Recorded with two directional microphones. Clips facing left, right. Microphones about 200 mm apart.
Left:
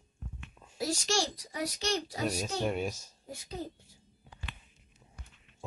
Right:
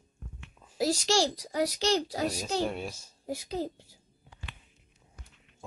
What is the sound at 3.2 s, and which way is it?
Speech, 80° right.